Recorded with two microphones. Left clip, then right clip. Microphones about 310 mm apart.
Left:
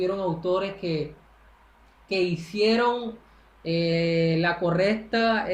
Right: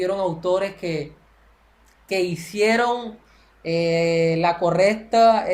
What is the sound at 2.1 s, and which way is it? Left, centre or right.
Speech, right.